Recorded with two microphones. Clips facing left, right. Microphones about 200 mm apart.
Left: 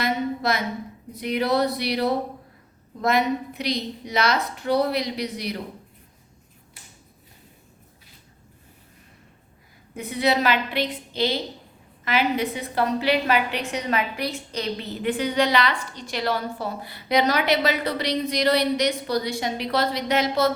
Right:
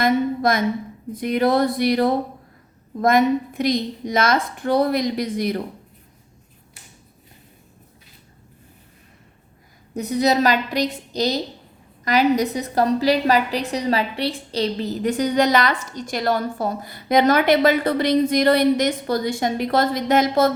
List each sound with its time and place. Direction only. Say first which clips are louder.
0.0 s a sound: right 6 dB; 50° right (ahead or behind)
1.1 s a woman's voice: right 4 dB; 50° right (ahead or behind)
9.9 s a woman's voice: right 4 dB; 40° right (ahead or behind)